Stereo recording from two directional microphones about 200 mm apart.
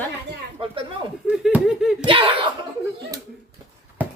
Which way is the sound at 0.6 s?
25° right (ahead or behind).